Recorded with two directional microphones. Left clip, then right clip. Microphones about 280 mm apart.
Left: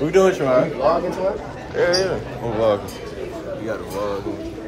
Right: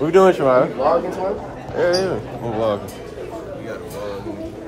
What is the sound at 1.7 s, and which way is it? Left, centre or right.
Speech, centre.